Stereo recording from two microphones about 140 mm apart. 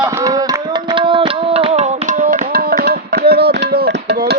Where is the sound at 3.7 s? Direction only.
90° right.